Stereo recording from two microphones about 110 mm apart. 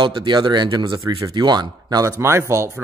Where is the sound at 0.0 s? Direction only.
50° right (ahead or behind).